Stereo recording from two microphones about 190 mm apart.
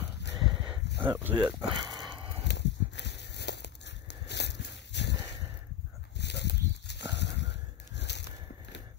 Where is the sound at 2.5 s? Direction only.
65° left (ahead or behind).